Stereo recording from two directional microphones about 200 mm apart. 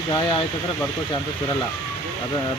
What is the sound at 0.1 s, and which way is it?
Speech, 25° left (ahead or behind).